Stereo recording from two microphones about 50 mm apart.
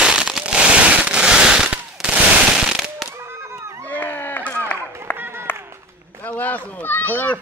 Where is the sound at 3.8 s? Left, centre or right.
Left.